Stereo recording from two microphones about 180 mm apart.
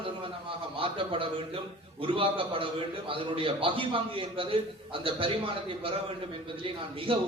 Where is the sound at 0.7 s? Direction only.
30° right (ahead or behind).